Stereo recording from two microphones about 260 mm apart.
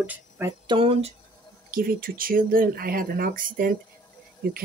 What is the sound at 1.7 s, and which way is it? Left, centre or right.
Music, right.